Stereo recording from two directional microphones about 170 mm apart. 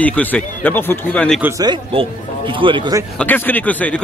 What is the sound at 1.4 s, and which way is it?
A man's voice, 20° right (ahead or behind).